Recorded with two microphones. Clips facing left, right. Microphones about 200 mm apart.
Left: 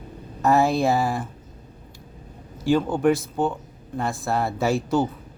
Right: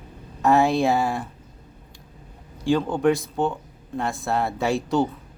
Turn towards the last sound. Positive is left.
turn(degrees=0)  # may be behind; listen again after turning